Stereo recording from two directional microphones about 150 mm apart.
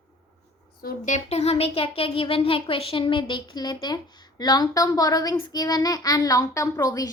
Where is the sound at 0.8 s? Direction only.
75° left (ahead or behind).